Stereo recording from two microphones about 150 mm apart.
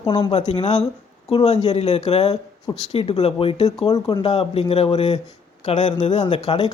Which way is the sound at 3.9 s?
25° left (ahead or behind).